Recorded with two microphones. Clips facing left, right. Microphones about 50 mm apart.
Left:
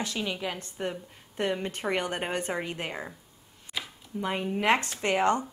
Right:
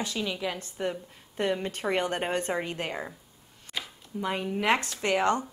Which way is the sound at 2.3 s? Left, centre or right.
Left.